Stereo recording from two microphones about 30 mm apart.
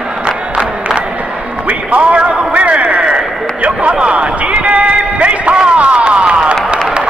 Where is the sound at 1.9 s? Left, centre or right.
Right.